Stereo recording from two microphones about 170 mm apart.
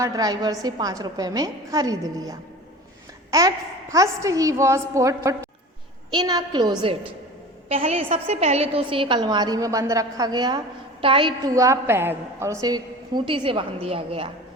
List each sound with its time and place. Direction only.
0.0 s a woman's voice: 20° right (ahead or behind)
7.7 s a woman's voice: 35° right (ahead or behind)